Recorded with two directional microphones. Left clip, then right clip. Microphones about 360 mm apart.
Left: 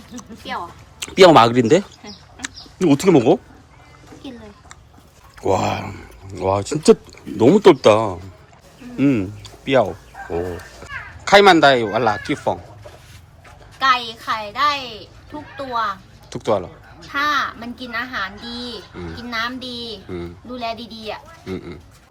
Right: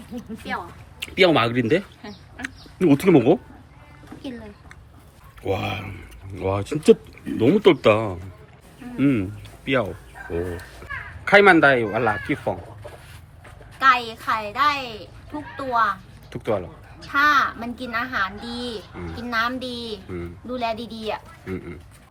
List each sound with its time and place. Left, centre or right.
0.2 s speech: centre
2.4 s speech: centre
5.5 s speech: left
5.7 s speech: centre
11.3 s speech: centre
13.7 s a woman's voice: centre